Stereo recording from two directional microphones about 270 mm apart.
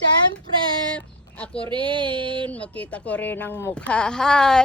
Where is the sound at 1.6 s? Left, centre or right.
Centre.